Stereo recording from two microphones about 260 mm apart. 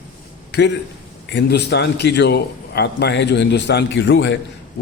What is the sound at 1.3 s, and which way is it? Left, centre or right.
A man's voice, left.